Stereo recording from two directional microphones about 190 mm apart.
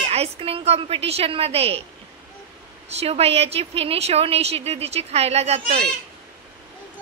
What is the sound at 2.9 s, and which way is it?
A woman's voice, 35° right (ahead or behind).